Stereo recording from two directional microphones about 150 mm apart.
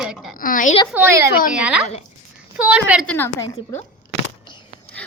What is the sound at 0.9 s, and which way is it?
Speech, 15° right (ahead or behind).